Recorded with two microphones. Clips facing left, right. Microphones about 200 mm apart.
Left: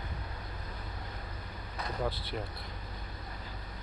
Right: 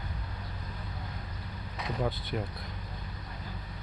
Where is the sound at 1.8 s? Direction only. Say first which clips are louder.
Right 2 dB; centre (ahead or behind).